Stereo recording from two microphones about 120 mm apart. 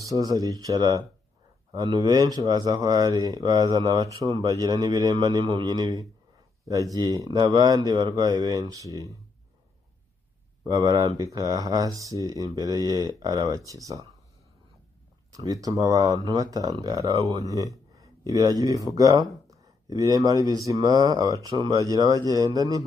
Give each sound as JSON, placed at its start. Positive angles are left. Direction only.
{"t": 0.0, "sound": "speech", "side_deg": -30}
{"t": 10.6, "sound": "speech", "side_deg": -35}
{"t": 15.3, "sound": "speech", "side_deg": -30}